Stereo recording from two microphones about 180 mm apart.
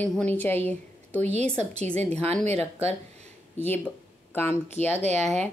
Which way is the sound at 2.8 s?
35° right (ahead or behind).